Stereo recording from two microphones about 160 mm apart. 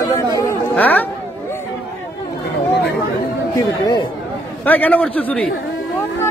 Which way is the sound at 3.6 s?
25° left (ahead or behind).